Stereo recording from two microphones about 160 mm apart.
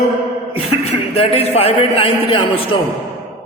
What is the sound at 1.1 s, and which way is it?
Mantra, 40° left (ahead or behind).